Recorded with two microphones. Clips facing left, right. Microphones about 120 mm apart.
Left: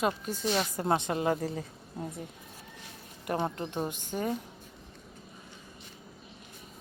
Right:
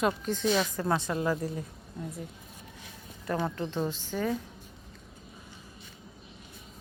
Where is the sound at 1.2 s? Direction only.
65° left (ahead or behind).